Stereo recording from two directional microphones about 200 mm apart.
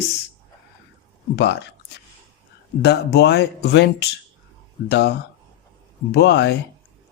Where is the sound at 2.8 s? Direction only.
55° left (ahead or behind).